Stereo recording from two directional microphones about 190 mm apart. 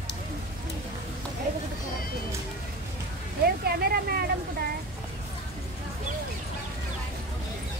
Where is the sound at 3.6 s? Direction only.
55° right (ahead or behind).